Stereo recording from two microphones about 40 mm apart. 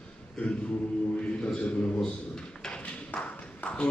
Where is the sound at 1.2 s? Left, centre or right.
Left.